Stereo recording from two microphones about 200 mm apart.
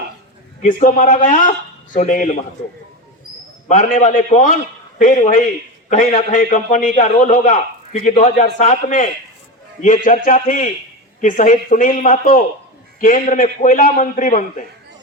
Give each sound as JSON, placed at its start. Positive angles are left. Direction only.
{"t": 0.6, "sound": "a man's voice", "side_deg": 40}
{"t": 3.7, "sound": "a man's voice", "side_deg": 40}